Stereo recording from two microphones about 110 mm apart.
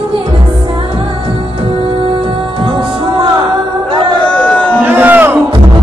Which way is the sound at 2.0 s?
50° right (ahead or behind).